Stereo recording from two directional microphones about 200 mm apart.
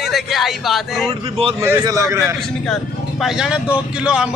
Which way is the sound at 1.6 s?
15° right (ahead or behind).